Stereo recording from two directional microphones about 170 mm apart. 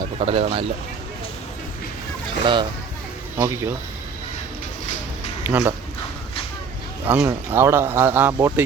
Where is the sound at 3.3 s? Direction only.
15° right (ahead or behind).